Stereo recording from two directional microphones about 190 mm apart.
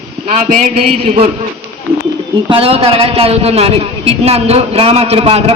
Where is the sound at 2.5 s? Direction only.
30° right (ahead or behind).